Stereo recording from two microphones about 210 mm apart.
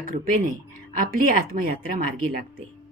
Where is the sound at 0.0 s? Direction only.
40° right (ahead or behind).